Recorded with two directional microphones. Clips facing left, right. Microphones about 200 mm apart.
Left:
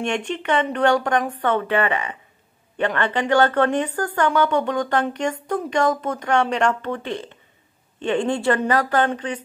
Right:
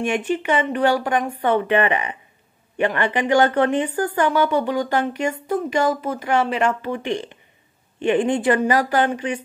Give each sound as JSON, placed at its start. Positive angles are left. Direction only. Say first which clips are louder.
{"t": 0.0, "sound": "speech", "louder": "right 3 dB", "side_deg": -5}